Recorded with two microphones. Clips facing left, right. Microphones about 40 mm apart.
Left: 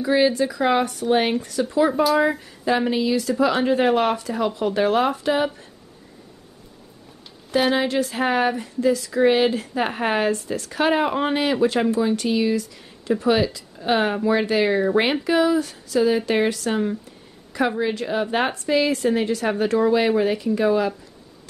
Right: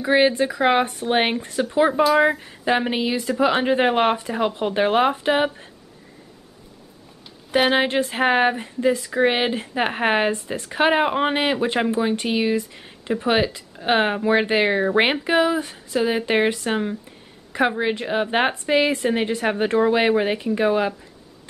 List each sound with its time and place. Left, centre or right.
0.0 s speech: right
7.5 s speech: right